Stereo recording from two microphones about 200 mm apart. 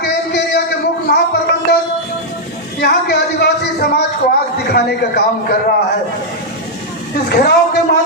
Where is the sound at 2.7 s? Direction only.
55° left (ahead or behind).